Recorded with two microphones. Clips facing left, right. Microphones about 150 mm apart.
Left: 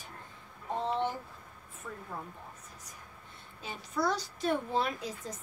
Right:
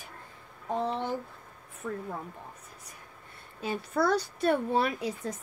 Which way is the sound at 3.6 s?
60° right (ahead or behind).